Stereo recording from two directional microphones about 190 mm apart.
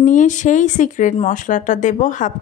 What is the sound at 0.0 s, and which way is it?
Speech, 40° left (ahead or behind).